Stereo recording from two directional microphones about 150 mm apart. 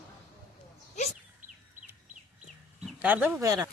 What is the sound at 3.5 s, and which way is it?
Speech, 25° right (ahead or behind).